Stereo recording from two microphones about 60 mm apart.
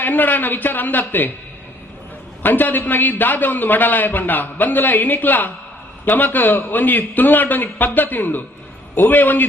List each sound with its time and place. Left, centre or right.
0.0 s a man's voice: left
2.4 s a man's voice: left